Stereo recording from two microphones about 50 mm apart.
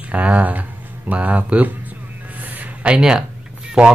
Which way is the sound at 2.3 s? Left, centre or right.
Right.